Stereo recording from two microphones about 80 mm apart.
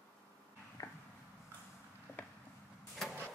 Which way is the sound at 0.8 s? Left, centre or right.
Left.